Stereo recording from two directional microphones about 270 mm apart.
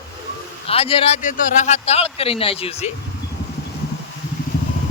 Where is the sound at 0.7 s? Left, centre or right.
Left.